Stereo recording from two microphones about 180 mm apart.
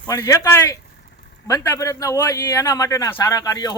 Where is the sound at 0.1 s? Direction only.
15° left (ahead or behind).